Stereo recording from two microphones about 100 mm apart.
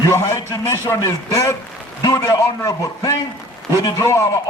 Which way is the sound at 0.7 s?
30° left (ahead or behind).